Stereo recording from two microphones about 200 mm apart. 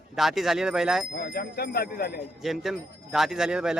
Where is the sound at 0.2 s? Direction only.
Centre (ahead or behind).